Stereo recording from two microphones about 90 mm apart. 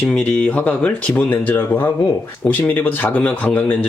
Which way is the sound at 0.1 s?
15° left (ahead or behind).